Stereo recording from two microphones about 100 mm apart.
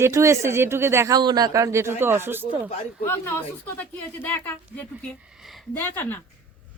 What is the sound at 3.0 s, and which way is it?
Speech, 20° left (ahead or behind).